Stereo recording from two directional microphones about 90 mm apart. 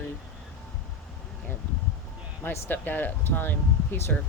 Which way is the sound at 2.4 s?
20° left (ahead or behind).